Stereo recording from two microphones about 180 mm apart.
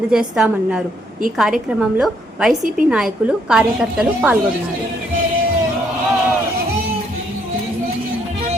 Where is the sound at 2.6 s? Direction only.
45° right (ahead or behind).